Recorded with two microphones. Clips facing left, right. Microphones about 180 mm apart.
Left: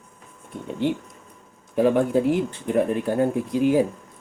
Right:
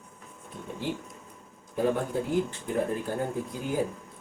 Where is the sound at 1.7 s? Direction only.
85° left.